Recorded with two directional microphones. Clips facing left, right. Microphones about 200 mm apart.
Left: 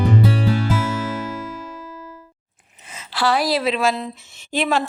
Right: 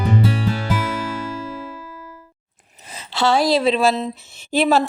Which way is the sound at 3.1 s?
25° right (ahead or behind).